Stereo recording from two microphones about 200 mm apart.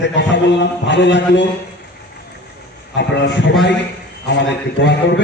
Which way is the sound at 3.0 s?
60° left (ahead or behind).